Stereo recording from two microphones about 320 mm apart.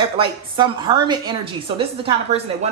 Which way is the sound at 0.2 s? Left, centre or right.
Centre.